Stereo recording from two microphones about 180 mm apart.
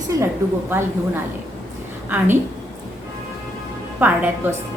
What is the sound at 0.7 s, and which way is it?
A woman's voice, 10° right (ahead or behind).